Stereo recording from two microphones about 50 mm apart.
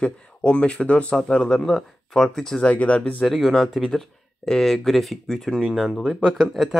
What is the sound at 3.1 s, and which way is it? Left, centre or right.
Speech, centre.